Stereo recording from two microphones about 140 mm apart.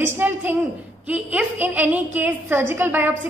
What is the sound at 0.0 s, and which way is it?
A woman's voice, 15° right (ahead or behind).